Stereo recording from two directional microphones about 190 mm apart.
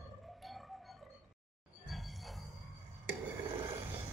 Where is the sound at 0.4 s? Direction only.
Centre (ahead or behind).